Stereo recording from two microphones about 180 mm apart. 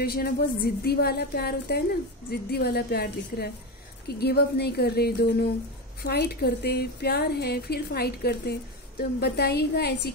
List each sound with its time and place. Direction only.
0.0 s speech: 60° left (ahead or behind)